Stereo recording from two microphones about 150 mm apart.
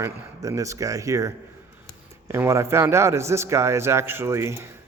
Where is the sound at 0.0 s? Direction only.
20° right (ahead or behind).